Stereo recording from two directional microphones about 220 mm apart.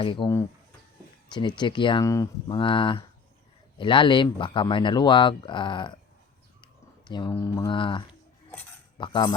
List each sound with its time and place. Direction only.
0.0 s speech: 25° left (ahead or behind)